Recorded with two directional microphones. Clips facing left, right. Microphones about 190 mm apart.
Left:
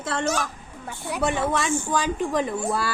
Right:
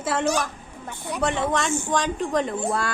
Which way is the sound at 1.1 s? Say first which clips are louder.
Even; 10° left (ahead or behind).